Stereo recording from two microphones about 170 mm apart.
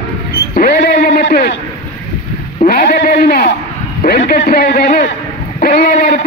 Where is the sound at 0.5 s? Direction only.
60° left (ahead or behind).